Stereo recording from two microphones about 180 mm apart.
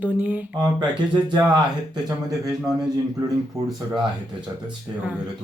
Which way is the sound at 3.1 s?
20° right (ahead or behind).